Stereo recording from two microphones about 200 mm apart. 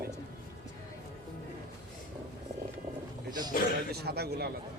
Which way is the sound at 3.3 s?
20° right (ahead or behind).